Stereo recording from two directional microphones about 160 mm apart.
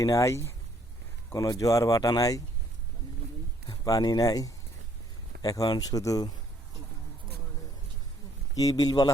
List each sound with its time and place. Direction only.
0.0 s speech: 20° left (ahead or behind)
3.7 s speech: 25° left (ahead or behind)
8.5 s speech: 25° left (ahead or behind)